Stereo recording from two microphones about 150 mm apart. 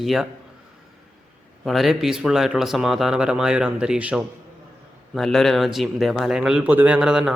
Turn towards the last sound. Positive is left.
turn(degrees=-5)  # may be behind; listen again after turning